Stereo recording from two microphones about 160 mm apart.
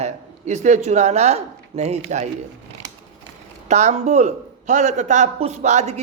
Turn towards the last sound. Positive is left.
turn(degrees=-45)  # may be behind; listen again after turning